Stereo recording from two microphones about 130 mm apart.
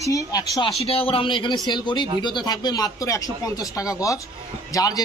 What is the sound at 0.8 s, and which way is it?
A man's voice, 45° left (ahead or behind).